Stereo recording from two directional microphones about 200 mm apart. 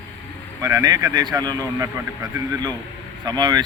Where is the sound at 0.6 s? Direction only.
20° right (ahead or behind).